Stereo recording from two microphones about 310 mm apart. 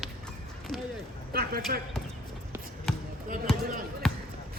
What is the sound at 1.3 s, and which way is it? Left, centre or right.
Basketball bounce, right.